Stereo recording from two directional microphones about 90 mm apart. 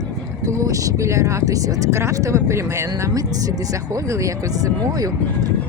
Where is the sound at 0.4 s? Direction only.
40° right (ahead or behind).